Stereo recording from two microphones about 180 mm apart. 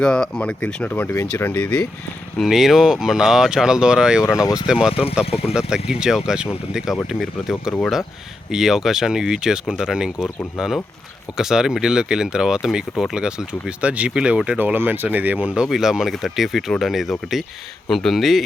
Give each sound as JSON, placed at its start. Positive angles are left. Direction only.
{"t": 0.0, "sound": "speech", "side_deg": 5}
{"t": 2.4, "sound": "speech", "side_deg": 0}
{"t": 4.4, "sound": "speech", "side_deg": 20}
{"t": 4.6, "sound": "speech", "side_deg": -5}